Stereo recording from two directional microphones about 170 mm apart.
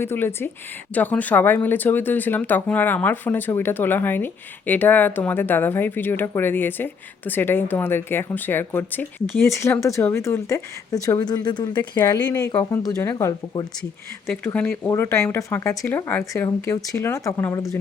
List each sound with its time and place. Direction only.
0.0 s speech: 15° left (ahead or behind)